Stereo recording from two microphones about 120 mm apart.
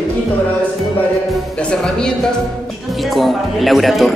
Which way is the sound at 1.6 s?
5° left (ahead or behind).